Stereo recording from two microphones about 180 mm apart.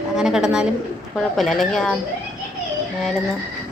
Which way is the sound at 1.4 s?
Centre (ahead or behind).